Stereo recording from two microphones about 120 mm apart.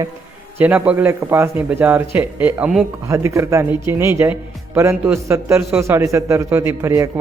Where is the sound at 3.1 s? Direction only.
25° right (ahead or behind).